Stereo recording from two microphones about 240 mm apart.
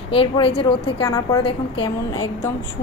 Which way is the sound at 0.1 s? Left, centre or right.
Left.